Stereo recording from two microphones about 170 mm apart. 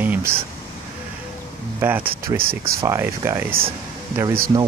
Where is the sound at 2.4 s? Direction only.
60° right (ahead or behind).